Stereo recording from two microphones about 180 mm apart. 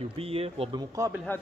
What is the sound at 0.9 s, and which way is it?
Speech, 15° right (ahead or behind).